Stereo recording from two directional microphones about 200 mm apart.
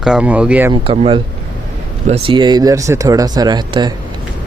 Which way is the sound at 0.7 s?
25° right (ahead or behind).